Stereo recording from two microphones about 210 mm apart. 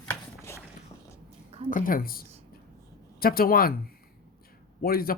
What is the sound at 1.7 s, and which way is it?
Speech, 40° left (ahead or behind).